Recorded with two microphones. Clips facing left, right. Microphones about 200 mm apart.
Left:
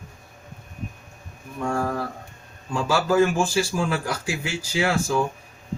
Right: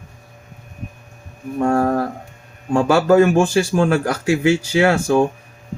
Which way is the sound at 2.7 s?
65° right (ahead or behind).